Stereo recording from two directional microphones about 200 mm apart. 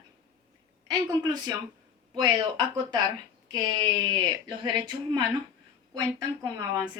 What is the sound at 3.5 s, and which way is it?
Speech, 20° right (ahead or behind).